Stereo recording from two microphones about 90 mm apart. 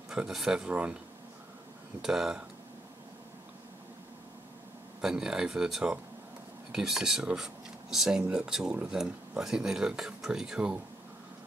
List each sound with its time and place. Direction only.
0.1 s speech: 5° right (ahead or behind)
2.0 s speech: 5° right (ahead or behind)
5.0 s speech: 5° right (ahead or behind)